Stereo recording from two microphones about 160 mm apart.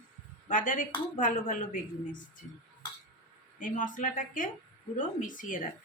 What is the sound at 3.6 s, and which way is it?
A woman's voice, 55° left (ahead or behind).